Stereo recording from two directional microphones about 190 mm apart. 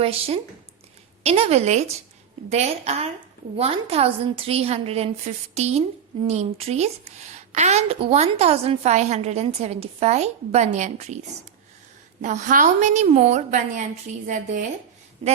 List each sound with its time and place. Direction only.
0.0 s a woman's voice: 30° right (ahead or behind)
12.2 s a woman's voice: 40° right (ahead or behind)